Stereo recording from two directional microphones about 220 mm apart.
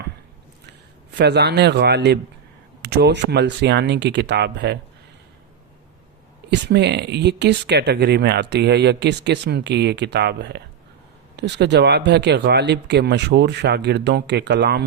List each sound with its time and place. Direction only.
1.1 s speech: 50° right (ahead or behind)
6.5 s speech: 50° right (ahead or behind)